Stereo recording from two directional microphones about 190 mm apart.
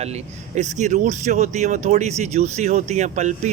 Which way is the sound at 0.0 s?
35° right (ahead or behind).